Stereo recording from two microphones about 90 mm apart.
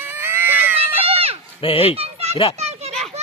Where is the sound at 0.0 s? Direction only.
25° right (ahead or behind).